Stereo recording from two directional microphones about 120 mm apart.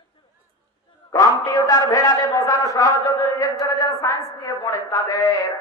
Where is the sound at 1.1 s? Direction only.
30° left (ahead or behind).